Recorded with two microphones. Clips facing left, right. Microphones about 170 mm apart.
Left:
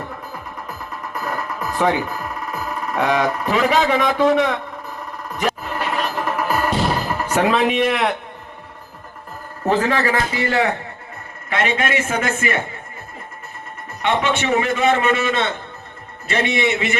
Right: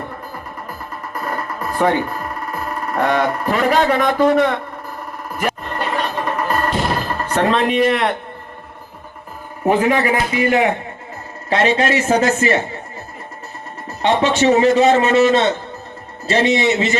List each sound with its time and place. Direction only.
0.7 s music: centre (ahead or behind)
9.6 s a man's voice: 15° right (ahead or behind)
11.4 s a man's voice: 30° right (ahead or behind)
14.0 s speech: 35° right (ahead or behind)
14.6 s a man's voice: 25° right (ahead or behind)
15.2 s speech: 35° right (ahead or behind)
16.3 s a man's voice: 25° right (ahead or behind)